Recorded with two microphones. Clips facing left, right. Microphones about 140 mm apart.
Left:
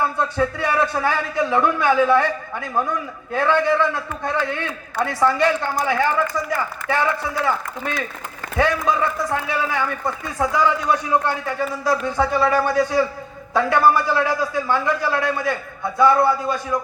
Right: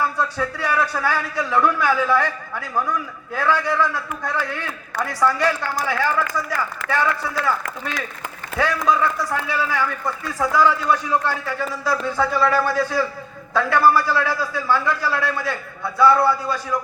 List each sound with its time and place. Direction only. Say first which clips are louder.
0.0 s a man's voice: left 2 dB; 25° left (ahead or behind)
8.5 s a man's voice: even; 20° left (ahead or behind)